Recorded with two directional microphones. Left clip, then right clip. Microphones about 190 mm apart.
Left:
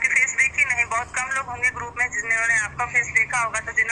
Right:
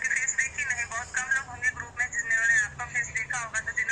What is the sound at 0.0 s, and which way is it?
Speech, 40° left (ahead or behind).